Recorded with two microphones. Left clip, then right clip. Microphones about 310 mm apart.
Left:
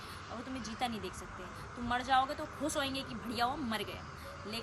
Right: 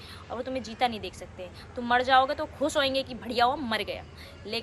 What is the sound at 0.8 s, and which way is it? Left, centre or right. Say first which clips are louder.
Speech: right 10 dB; centre.